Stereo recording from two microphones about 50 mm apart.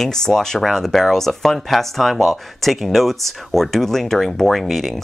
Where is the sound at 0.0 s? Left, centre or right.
Centre.